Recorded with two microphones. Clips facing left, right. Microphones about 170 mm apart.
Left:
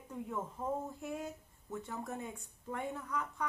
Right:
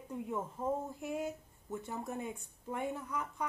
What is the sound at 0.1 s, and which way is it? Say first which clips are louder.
Speech: right 2 dB; 15° right (ahead or behind).